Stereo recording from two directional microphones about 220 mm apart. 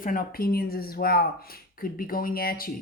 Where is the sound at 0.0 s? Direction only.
40° left (ahead or behind).